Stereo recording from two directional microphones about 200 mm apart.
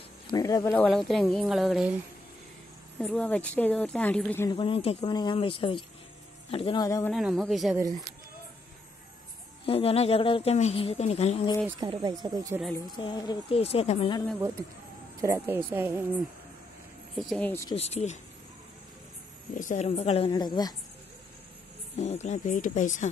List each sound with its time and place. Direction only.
0.3 s a woman's voice: 20° left (ahead or behind)
0.8 s a woman's voice: centre (ahead or behind)
3.0 s a woman's voice: 5° left (ahead or behind)
4.5 s speech: 25° left (ahead or behind)
7.1 s a woman's voice: centre (ahead or behind)
9.7 s speech: 30° left (ahead or behind)
11.6 s speech: 20° right (ahead or behind)
12.9 s speech: 20° left (ahead or behind)
15.1 s speech: 15° right (ahead or behind)
17.1 s a woman's voice: centre (ahead or behind)
17.6 s a woman's voice: 30° left (ahead or behind)
19.5 s a woman's voice: 40° left (ahead or behind); by 20.7 s 20° left (ahead or behind)
21.9 s a woman's voice: 35° left (ahead or behind)